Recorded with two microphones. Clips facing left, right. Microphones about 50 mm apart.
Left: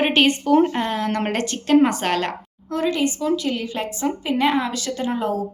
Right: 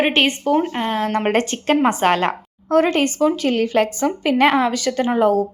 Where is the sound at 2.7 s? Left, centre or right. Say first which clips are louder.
Right 5 dB; right.